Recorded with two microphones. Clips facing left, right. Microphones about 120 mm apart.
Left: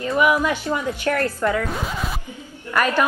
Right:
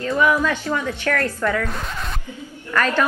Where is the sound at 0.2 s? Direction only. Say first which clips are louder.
Even; 15° left (ahead or behind).